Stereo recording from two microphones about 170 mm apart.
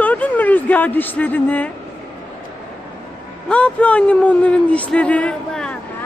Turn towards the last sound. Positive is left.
turn(degrees=5)  # may be behind; listen again after turning